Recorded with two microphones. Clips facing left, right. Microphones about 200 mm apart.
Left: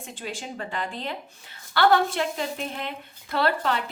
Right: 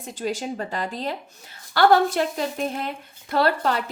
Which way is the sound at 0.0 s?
40° right (ahead or behind).